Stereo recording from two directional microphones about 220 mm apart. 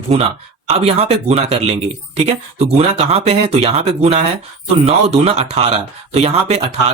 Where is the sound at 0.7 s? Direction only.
30° right (ahead or behind).